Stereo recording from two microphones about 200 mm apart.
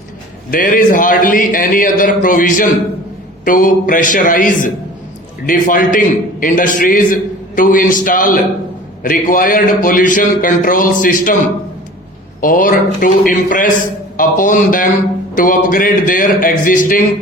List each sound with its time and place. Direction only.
0.5 s a man's voice: 40° left (ahead or behind)
12.4 s a man's voice: 45° left (ahead or behind)